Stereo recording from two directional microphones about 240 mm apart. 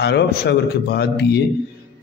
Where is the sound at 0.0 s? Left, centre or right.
Left.